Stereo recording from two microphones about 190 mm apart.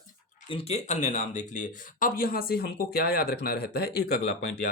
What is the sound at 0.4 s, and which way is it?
Speech, 30° left (ahead or behind).